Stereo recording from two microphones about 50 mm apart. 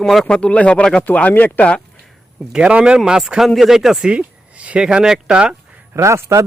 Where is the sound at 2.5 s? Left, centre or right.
Right.